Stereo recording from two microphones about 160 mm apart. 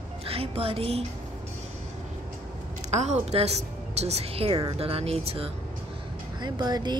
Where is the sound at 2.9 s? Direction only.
45° right (ahead or behind).